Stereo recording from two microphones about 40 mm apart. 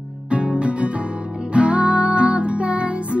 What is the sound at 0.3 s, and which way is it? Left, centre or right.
Music, right.